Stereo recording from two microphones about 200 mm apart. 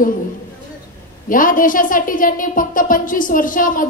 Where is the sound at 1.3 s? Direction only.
45° left (ahead or behind).